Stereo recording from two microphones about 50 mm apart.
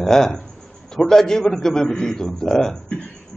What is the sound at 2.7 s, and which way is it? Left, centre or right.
Speech, left.